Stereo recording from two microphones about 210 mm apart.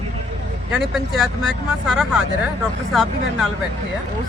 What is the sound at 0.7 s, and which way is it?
Speech, centre (ahead or behind).